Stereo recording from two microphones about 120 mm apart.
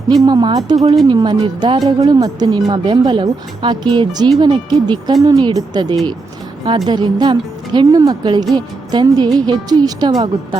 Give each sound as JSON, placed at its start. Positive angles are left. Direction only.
{"t": 0.2, "sound": "speech", "side_deg": -35}